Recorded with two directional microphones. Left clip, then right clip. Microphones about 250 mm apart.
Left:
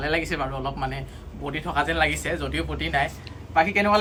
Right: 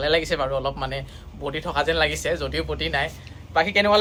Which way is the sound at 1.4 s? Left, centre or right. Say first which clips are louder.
Right 2 dB; right.